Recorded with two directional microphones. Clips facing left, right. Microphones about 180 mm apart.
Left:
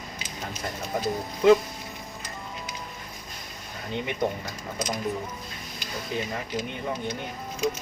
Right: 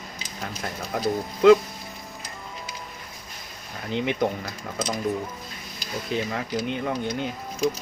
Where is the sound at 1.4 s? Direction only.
90° right.